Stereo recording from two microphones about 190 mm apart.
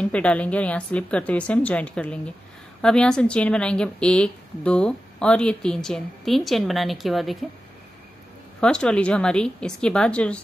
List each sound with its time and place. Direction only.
0.0 s a woman's voice: 5° left (ahead or behind)
8.5 s a woman's voice: 5° left (ahead or behind)